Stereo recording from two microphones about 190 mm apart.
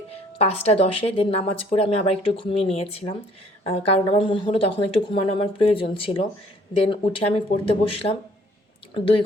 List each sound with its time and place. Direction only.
0.3 s a woman's voice: 35° left (ahead or behind)